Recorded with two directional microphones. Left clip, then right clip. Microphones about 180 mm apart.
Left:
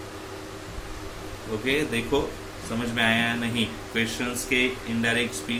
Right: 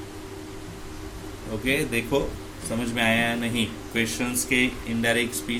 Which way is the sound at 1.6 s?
30° right (ahead or behind).